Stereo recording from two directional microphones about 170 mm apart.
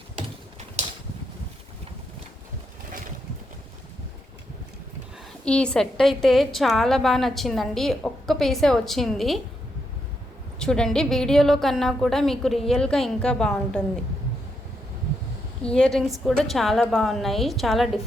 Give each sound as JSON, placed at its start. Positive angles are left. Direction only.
{"t": 5.5, "sound": "a woman's voice", "side_deg": 5}
{"t": 10.6, "sound": "a woman's voice", "side_deg": 5}
{"t": 15.6, "sound": "a woman's voice", "side_deg": 5}